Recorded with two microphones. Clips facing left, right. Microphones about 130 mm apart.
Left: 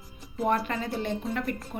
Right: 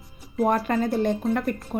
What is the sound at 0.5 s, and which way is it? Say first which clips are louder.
Speech: right 6 dB; 45° right (ahead or behind).